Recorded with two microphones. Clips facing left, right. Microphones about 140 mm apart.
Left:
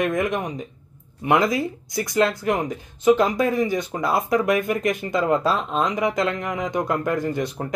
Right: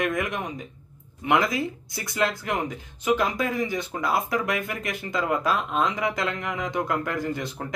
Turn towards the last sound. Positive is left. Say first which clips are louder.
# left 4 dB
turn(degrees=20)  # may be behind; listen again after turning